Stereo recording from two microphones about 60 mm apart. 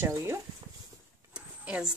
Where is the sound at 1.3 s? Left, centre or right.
Centre.